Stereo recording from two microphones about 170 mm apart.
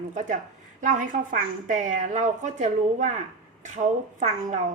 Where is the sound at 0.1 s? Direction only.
45° right (ahead or behind).